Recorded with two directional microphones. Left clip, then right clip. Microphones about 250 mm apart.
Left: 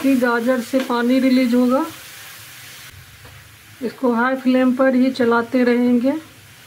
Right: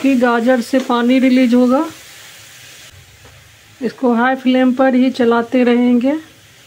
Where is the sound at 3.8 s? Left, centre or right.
Centre.